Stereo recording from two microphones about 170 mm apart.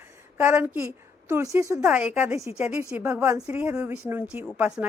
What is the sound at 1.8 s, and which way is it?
A woman's voice, 5° right (ahead or behind).